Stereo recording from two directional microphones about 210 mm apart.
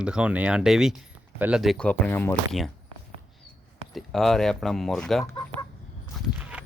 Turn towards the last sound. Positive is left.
turn(degrees=-5)  # may be behind; listen again after turning